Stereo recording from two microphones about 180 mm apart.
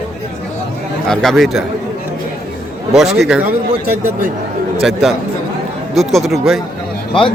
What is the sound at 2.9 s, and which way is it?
Speech, centre (ahead or behind).